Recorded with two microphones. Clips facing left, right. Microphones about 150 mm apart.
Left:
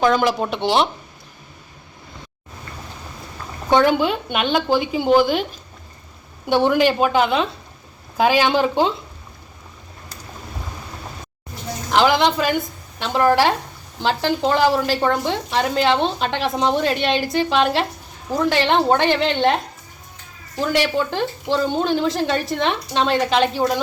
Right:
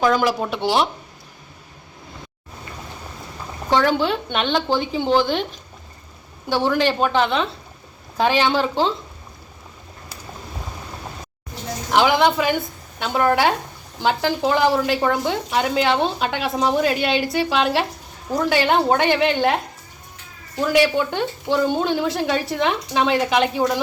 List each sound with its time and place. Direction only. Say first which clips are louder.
0.0 s speech: left 1 dB; 5° right (ahead or behind)
3.7 s speech: left 2 dB; 15° left (ahead or behind)
6.5 s speech: left 3 dB; 15° left (ahead or behind)
11.9 s speech: even; 5° right (ahead or behind)
21.2 s a woman's voice: even; 5° right (ahead or behind)